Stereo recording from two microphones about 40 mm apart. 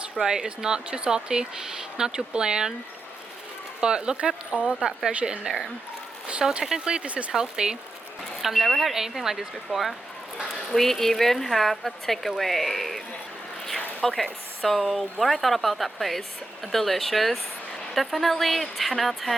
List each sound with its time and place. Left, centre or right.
0.2 s speech: centre
3.8 s speech: right
6.4 s speech: centre
6.7 s speech: centre
7.1 s speech: right
7.3 s speech: centre
8.4 s speech: centre
10.7 s a woman's voice: centre
14.0 s a woman's voice: centre